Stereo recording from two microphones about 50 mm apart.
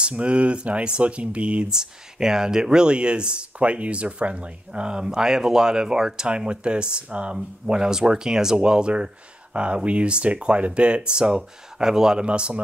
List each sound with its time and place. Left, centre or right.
0.0 s speech: right
12.3 s speech: right